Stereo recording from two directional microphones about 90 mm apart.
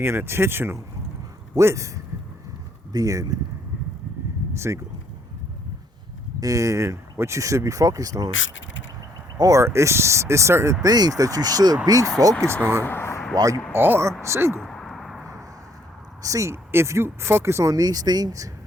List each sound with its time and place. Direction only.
0.0 s speech: 30° right (ahead or behind)
1.5 s speech: 35° right (ahead or behind)
4.5 s speech: 30° right (ahead or behind)
6.4 s speech: 40° right (ahead or behind)
9.4 s speech: 35° right (ahead or behind)
10.8 s speech: 45° right (ahead or behind)
12.8 s a sound: 25° left (ahead or behind)
13.3 s speech: 40° right (ahead or behind)
13.7 s speech: 25° right (ahead or behind)
14.6 s a sound: 5° left (ahead or behind)
16.2 s speech: 35° right (ahead or behind)